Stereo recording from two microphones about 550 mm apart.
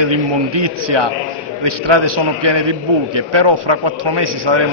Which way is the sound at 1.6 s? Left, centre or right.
Right.